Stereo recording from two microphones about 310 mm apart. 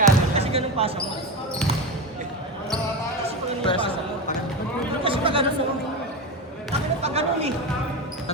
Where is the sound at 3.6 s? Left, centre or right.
Centre.